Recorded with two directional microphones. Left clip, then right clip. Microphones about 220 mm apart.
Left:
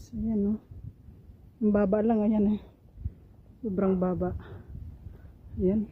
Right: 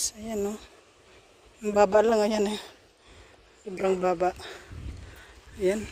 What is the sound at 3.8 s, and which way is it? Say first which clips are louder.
Speech: right 6 dB; 25° right (ahead or behind).